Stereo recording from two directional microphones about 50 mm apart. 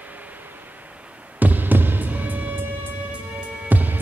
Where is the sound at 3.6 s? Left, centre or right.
Right.